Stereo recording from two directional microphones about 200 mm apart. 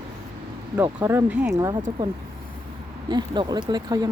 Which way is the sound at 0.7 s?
10° right (ahead or behind).